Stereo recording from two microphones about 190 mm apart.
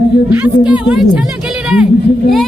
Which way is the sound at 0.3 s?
10° right (ahead or behind).